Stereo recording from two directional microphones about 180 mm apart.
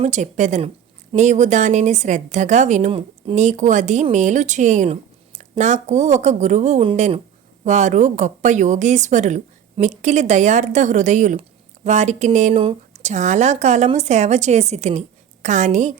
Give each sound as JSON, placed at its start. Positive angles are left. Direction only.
{"t": 0.0, "sound": "a woman's voice", "side_deg": -40}